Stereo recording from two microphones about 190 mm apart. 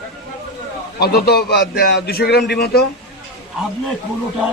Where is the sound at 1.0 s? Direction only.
55° left (ahead or behind).